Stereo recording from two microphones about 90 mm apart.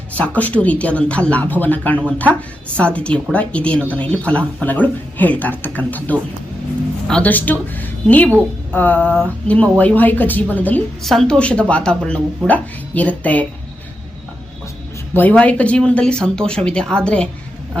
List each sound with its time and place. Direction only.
0.1 s a woman's voice: 15° left (ahead or behind)
11.0 s speech: 5° left (ahead or behind)
15.1 s speech: 20° left (ahead or behind)